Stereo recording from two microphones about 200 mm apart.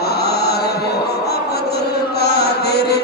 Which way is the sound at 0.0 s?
55° left (ahead or behind).